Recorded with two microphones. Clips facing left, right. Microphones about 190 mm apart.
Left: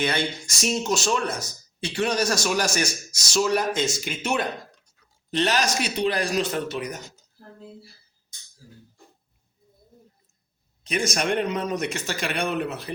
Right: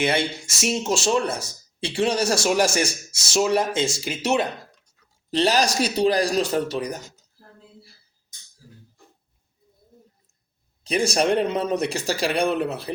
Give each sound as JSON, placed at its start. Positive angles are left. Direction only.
{"t": 0.0, "sound": "speech", "side_deg": -25}
{"t": 10.8, "sound": "speech", "side_deg": -30}